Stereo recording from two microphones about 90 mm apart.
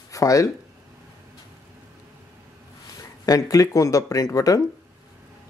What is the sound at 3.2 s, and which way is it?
Speech, 40° left (ahead or behind).